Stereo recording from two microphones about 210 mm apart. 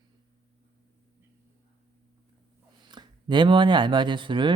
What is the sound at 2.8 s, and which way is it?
Speech, 20° right (ahead or behind).